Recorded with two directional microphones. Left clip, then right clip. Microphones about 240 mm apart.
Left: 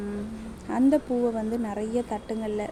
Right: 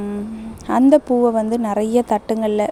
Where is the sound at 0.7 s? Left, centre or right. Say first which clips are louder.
Right 10 dB; right.